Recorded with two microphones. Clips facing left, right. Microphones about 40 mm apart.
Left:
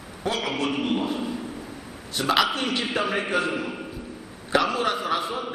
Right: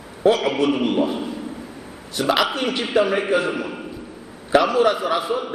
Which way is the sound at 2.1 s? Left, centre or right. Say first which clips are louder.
Right 3 dB; centre.